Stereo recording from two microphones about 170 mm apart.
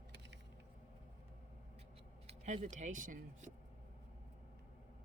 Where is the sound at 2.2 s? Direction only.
45° right (ahead or behind).